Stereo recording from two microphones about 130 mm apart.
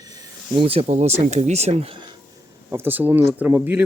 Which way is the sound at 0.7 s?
50° right (ahead or behind).